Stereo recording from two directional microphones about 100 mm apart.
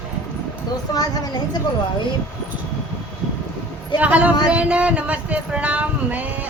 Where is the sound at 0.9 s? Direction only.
40° left (ahead or behind).